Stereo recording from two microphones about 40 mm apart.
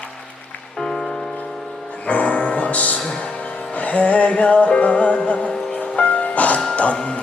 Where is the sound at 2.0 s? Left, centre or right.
Left.